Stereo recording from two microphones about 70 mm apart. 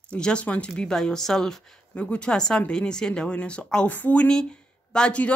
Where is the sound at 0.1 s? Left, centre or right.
Centre.